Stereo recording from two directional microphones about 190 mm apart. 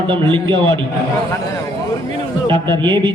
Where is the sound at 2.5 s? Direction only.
25° right (ahead or behind).